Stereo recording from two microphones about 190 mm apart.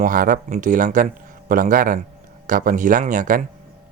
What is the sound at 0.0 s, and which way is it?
Speech, 45° right (ahead or behind).